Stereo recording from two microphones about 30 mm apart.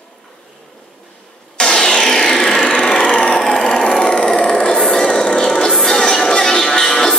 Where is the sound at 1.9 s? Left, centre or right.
Centre.